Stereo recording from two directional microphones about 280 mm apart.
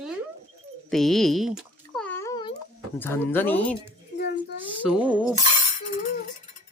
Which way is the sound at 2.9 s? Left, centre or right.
Centre.